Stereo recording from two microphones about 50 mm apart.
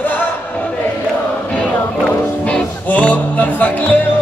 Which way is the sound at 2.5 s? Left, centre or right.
Left.